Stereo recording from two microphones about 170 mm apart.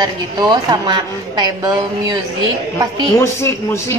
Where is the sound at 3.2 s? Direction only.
15° left (ahead or behind).